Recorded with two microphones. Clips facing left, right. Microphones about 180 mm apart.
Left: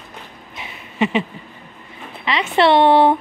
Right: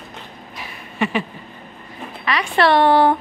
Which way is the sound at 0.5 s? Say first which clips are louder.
Left 1 dB; 20° left (ahead or behind).